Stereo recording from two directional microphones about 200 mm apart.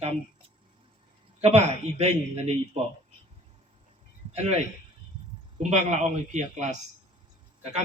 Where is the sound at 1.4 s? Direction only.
35° right (ahead or behind).